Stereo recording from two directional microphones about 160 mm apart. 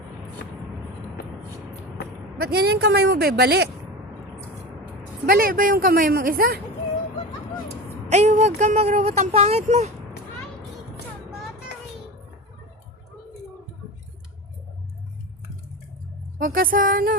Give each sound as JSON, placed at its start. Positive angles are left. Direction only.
{"t": 2.4, "sound": "speech", "side_deg": -90}
{"t": 5.2, "sound": "speech", "side_deg": -65}
{"t": 8.0, "sound": "speech", "side_deg": -45}
{"t": 16.4, "sound": "speech", "side_deg": -60}